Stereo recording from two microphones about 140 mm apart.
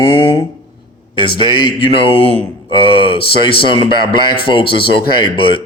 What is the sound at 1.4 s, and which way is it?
A man's voice, 40° left (ahead or behind).